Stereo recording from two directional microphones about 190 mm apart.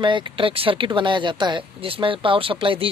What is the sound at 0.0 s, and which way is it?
Speech, 25° right (ahead or behind).